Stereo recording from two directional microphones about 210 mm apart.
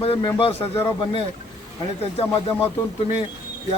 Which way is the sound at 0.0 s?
25° left (ahead or behind).